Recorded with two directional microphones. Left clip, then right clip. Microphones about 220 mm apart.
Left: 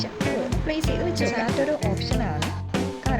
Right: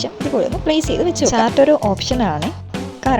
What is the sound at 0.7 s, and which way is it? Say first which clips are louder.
Speech: right 9 dB; 35° right (ahead or behind).